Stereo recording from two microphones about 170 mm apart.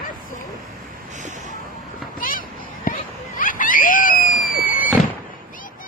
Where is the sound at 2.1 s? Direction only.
55° left (ahead or behind).